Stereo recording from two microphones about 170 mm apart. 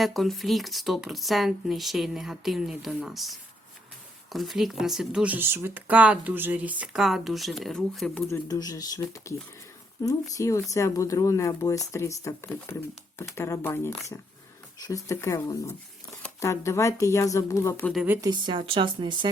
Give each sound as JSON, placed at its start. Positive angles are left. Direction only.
{"t": 0.0, "sound": "speech", "side_deg": 0}
{"t": 8.3, "sound": "speech", "side_deg": 20}
{"t": 17.9, "sound": "speech", "side_deg": -10}
{"t": 18.2, "sound": "speech", "side_deg": -25}